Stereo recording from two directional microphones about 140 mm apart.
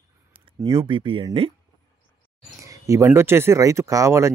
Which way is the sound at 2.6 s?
20° right (ahead or behind).